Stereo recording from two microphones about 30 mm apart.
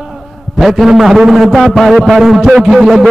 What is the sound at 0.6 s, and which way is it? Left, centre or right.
A man's voice, centre.